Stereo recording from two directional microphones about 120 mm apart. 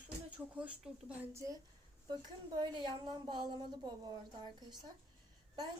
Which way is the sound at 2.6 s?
40° right (ahead or behind).